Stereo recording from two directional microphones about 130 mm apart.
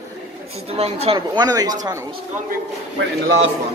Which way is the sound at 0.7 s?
50° right (ahead or behind).